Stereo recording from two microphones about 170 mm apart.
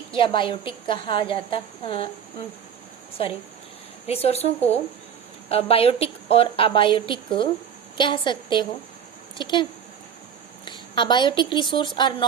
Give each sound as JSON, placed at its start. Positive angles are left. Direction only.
{"t": 0.1, "sound": "a woman's voice", "side_deg": 30}
{"t": 4.0, "sound": "a woman's voice", "side_deg": 35}
{"t": 10.7, "sound": "speech", "side_deg": 25}